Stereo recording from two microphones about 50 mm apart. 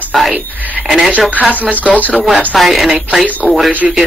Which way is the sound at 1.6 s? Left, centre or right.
Right.